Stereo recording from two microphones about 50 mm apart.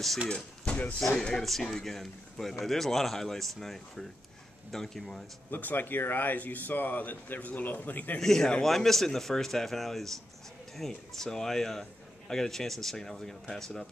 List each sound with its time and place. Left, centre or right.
0.3 s speech: left
1.4 s a man's voice: centre
5.5 s speech: left
8.2 s a man's voice: centre